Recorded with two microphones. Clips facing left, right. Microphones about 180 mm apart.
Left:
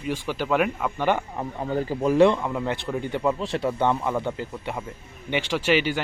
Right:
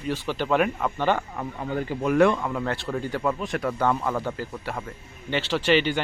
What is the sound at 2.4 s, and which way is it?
Speech, 15° left (ahead or behind).